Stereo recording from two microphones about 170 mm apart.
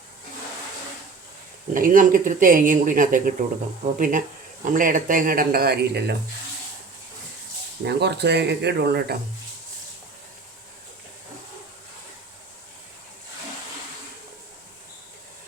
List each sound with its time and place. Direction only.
1.7 s speech: 55° right (ahead or behind); by 6.1 s 75° right (ahead or behind)
7.9 s speech: 80° right